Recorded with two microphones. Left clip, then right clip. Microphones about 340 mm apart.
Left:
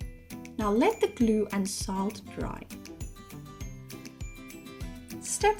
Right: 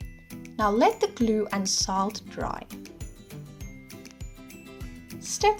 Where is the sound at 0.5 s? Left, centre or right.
Centre.